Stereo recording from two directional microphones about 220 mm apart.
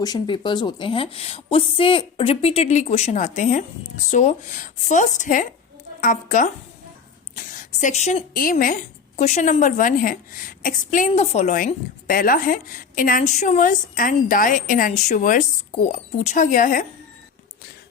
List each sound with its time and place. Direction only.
0.0 s a woman's voice: 20° left (ahead or behind); by 16.8 s 40° left (ahead or behind)